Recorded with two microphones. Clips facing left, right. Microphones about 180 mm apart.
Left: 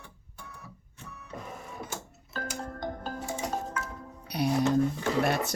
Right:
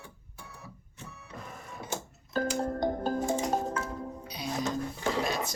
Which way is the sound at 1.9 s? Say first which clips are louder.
Right 3 dB; 35° right (ahead or behind).